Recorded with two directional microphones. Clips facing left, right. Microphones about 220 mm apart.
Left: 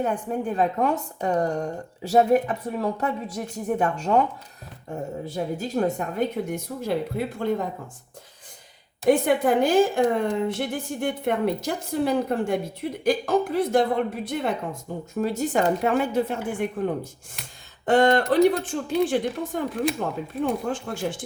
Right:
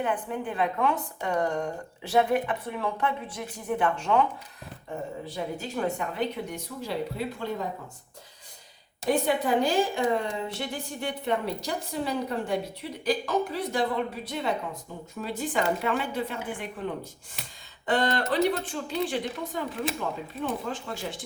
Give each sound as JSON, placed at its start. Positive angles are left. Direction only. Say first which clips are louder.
{"t": 0.0, "sound": "a woman's voice", "louder": "left 4 dB", "side_deg": 40}
{"t": 9.0, "sound": "a woman's voice", "louder": "left 6 dB", "side_deg": 50}